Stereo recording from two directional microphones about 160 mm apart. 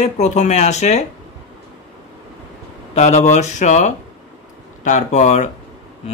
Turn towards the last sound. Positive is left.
turn(degrees=50)  # may be behind; listen again after turning